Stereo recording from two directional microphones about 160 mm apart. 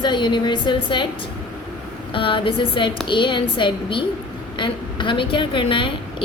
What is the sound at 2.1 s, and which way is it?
A woman's voice, 30° left (ahead or behind).